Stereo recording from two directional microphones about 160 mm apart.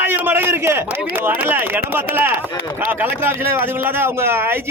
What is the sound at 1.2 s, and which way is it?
Speech, 10° right (ahead or behind).